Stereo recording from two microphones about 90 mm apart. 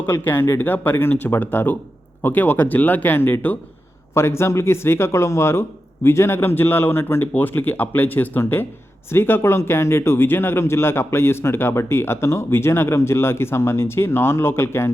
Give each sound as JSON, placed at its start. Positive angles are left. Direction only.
{"t": 0.0, "sound": "speech", "side_deg": 25}